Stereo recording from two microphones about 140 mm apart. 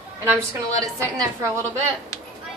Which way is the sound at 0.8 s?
20° right (ahead or behind).